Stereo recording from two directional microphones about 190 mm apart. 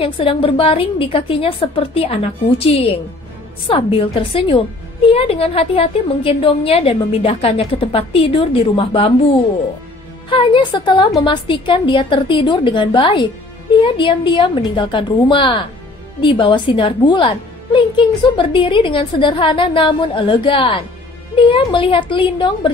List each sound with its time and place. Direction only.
0.0 s a woman's voice: 30° left (ahead or behind)
3.6 s a woman's voice: 25° left (ahead or behind)
10.3 s a woman's voice: 25° left (ahead or behind)